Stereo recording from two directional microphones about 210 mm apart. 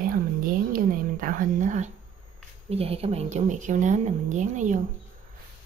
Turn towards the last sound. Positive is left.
turn(degrees=-35)  # may be behind; listen again after turning